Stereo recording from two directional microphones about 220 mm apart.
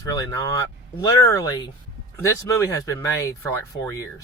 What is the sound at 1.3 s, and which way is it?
Speech, 15° left (ahead or behind).